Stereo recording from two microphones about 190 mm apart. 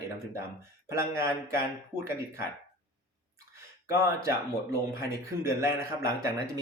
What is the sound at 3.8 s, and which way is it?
Speech, 15° right (ahead or behind).